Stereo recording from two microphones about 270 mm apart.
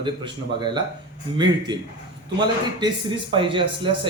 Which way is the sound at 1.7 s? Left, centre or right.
Centre.